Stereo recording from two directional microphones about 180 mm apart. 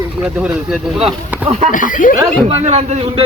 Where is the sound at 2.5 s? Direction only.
35° right (ahead or behind).